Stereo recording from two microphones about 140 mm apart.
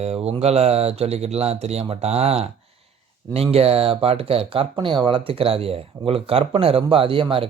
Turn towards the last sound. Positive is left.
turn(degrees=-40)  # may be behind; listen again after turning